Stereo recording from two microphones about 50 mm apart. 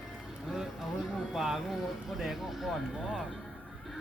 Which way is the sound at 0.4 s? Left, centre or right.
Centre.